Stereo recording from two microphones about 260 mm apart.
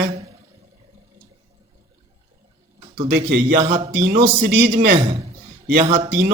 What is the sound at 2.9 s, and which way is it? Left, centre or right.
A man's voice, right.